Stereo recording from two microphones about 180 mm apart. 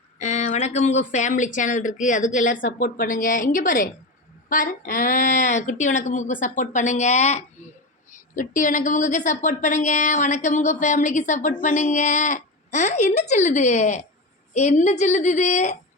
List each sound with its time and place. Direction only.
0.2 s a woman's voice: 40° left (ahead or behind)